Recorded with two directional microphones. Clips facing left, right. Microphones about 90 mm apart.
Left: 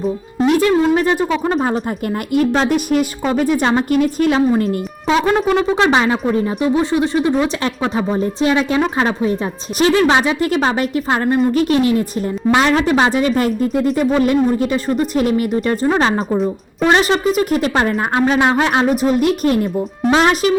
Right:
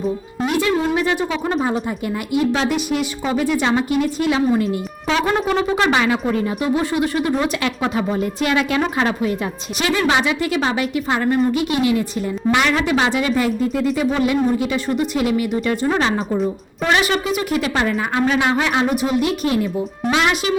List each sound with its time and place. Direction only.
0.4 s a sound: 40° left (ahead or behind)
2.3 s a woman's voice: 45° left (ahead or behind)
4.4 s speech: 35° left (ahead or behind)
5.7 s a woman's voice: 25° left (ahead or behind); by 19.6 s 50° left (ahead or behind)
20.1 s speech: 40° left (ahead or behind)